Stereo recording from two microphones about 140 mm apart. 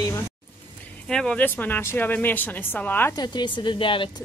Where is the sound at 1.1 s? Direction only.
5° left (ahead or behind).